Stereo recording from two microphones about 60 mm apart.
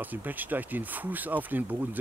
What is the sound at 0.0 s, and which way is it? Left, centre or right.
Speech, right.